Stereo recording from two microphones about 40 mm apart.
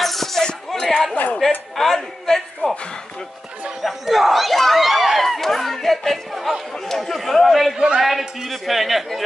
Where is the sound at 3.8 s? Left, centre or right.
Centre.